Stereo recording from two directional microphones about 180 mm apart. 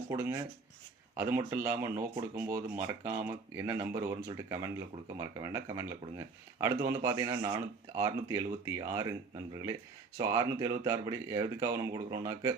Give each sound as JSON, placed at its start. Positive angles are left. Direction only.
{"t": 0.1, "sound": "speech", "side_deg": -15}